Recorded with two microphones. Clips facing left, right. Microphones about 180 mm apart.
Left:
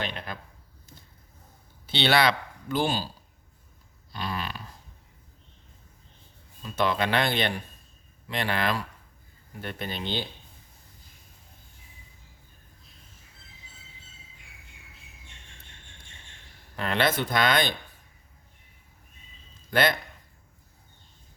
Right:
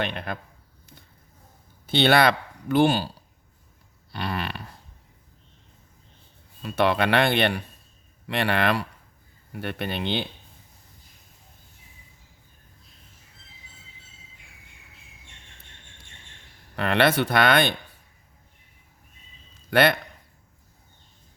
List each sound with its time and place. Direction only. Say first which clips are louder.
0.0 s speech: right 5 dB; 60° right (ahead or behind)
1.9 s speech: right 4 dB; 50° right (ahead or behind)
4.1 s a sound: right 3 dB; 65° right (ahead or behind)
6.6 s speech: right 4 dB; 65° right (ahead or behind)
16.7 s speech: right 5 dB; 65° right (ahead or behind)
19.7 s speech: right 4 dB; 65° right (ahead or behind)